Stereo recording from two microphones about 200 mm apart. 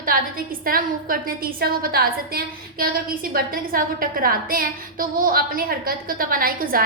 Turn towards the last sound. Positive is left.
turn(degrees=-45)  # may be behind; listen again after turning